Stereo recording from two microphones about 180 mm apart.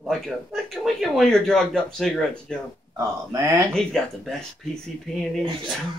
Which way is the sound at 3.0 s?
20° right (ahead or behind).